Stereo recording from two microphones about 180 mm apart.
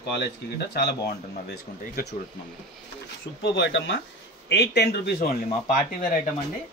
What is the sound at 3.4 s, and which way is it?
Speech, 90° left.